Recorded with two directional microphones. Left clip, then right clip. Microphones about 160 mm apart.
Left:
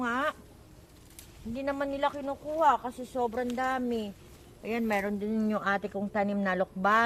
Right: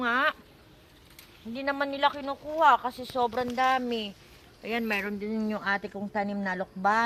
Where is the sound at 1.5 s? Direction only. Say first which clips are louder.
Right 2 dB; 10° right (ahead or behind).